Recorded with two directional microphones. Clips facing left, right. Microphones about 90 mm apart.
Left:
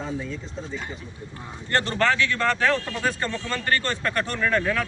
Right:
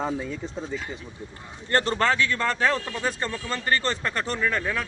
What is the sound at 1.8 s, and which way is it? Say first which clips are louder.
Speech: left 2 dB; 30° right (ahead or behind).